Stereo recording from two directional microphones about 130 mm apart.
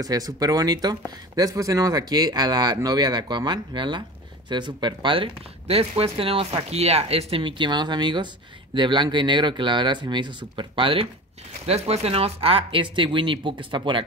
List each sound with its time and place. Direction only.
0.0 s speech: 30° right (ahead or behind)